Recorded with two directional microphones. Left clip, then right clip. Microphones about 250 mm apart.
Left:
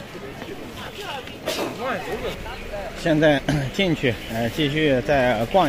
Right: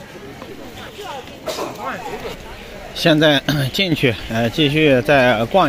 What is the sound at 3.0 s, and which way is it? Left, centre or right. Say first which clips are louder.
Speech: right 5 dB; right.